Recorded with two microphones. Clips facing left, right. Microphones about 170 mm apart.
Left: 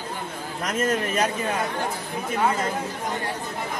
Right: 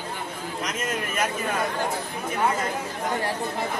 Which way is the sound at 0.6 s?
45° left (ahead or behind).